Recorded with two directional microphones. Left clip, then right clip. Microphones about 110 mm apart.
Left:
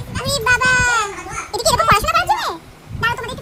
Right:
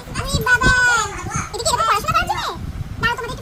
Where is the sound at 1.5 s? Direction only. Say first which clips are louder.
Left 4 dB; 50° left (ahead or behind).